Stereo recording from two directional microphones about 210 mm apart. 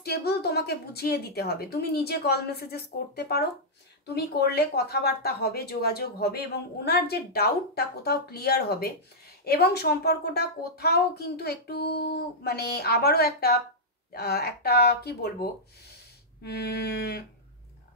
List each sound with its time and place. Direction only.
0.0 s speech: 50° left (ahead or behind)
16.4 s speech: 50° left (ahead or behind)